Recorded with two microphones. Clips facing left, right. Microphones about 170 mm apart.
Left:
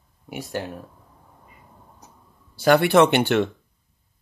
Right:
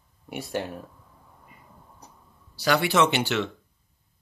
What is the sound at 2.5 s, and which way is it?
Speech, 50° left (ahead or behind).